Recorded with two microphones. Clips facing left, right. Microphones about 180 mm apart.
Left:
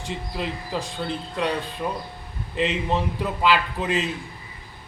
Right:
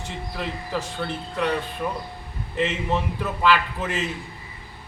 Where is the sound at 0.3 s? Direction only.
20° left (ahead or behind).